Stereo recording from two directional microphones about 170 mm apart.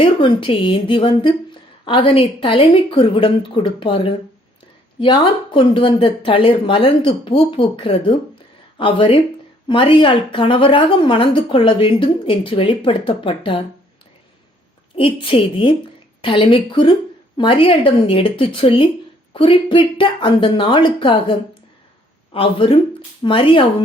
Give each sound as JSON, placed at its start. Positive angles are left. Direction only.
{"t": 0.0, "sound": "a woman's voice", "side_deg": 30}
{"t": 14.9, "sound": "a woman's voice", "side_deg": 30}